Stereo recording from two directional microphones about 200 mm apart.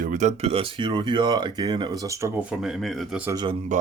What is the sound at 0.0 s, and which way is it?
Speech, 40° right (ahead or behind).